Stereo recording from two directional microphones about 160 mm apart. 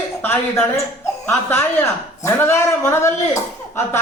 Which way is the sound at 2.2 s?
15° left (ahead or behind).